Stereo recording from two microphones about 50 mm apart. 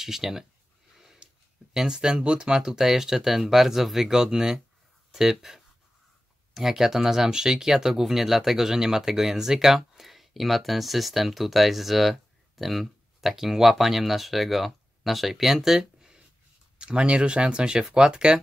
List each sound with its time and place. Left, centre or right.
0.0 s speech: centre
0.9 s sniff: centre
1.2 s speech: centre
16.7 s speech: right